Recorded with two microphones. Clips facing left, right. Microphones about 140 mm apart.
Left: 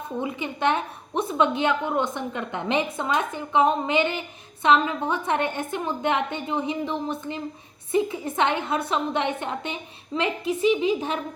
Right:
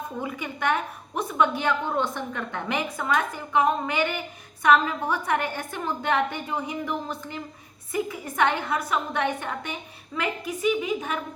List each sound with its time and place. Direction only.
0.2 s a woman's voice: 20° left (ahead or behind)